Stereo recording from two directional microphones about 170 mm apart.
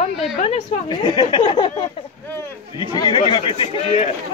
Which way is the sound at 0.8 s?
25° left (ahead or behind).